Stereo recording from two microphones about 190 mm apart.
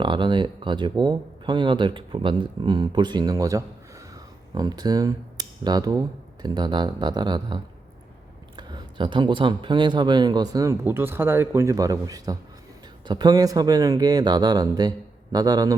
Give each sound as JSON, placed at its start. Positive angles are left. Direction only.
{"t": 0.0, "sound": "speech", "side_deg": -25}